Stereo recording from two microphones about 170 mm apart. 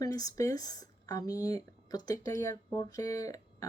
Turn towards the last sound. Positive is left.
turn(degrees=20)  # may be behind; listen again after turning